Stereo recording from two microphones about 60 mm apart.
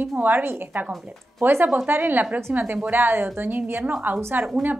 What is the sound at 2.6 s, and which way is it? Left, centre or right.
Speech, right.